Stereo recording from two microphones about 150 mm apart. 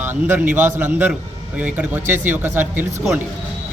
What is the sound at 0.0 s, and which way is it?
Speech, 15° right (ahead or behind).